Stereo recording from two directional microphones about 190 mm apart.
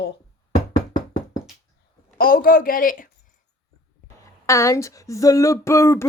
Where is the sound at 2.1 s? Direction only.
50° left (ahead or behind).